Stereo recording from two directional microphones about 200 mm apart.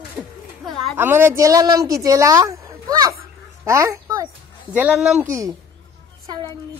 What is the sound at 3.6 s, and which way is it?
Speech, 15° right (ahead or behind).